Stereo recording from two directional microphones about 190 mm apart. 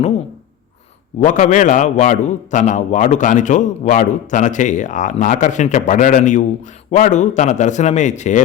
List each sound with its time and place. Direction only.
1.2 s a man's voice: 40° left (ahead or behind)